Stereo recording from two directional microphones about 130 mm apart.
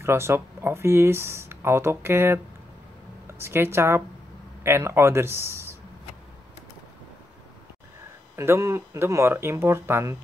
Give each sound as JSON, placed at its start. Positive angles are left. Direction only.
{"t": 0.0, "sound": "speech", "side_deg": -20}
{"t": 8.4, "sound": "speech", "side_deg": -20}